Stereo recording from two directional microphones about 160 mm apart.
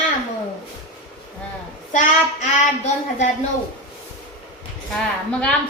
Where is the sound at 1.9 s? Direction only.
50° left (ahead or behind).